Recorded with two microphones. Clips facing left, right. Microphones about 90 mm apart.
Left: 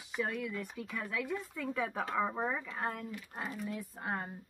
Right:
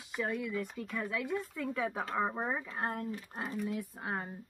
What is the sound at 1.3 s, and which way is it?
Speech, 5° right (ahead or behind).